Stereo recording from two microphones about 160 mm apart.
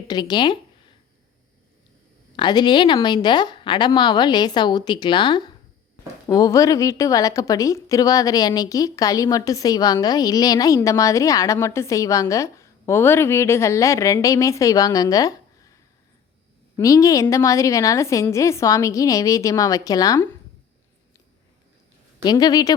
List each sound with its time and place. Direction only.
0.1 s a woman's voice: 25° left (ahead or behind)
2.3 s a woman's voice: 25° left (ahead or behind)
22.2 s a woman's voice: 25° left (ahead or behind)